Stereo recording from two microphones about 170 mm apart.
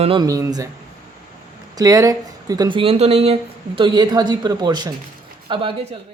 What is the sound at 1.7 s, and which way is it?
Speech, 20° right (ahead or behind).